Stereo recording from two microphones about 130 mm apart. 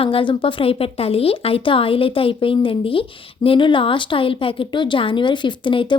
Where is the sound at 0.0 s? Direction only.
45° left (ahead or behind).